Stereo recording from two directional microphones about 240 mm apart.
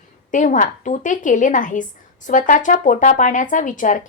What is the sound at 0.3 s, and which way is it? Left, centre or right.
Speech, left.